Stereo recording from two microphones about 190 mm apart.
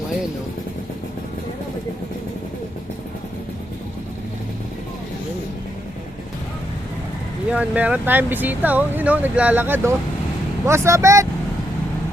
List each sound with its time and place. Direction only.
7.5 s speech: 5° right (ahead or behind)